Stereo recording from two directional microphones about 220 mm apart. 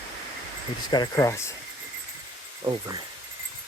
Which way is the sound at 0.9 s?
15° left (ahead or behind).